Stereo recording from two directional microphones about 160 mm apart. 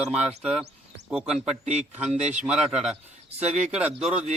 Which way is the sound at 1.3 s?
45° right (ahead or behind).